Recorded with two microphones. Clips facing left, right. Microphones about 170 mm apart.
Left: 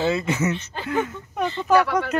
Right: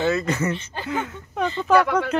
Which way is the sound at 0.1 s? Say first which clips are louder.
Even; 10° left (ahead or behind).